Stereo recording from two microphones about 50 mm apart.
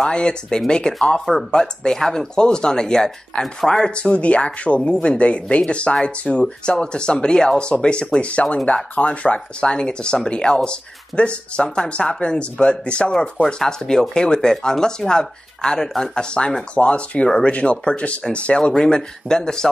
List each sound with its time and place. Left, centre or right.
0.0 s speech: centre